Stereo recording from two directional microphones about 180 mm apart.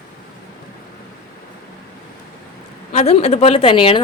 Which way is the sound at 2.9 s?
35° left (ahead or behind).